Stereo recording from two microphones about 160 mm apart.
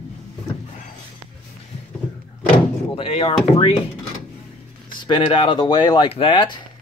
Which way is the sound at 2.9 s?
35° left (ahead or behind).